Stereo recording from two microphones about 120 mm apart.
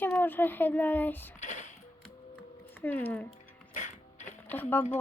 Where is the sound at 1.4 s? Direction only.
90° left.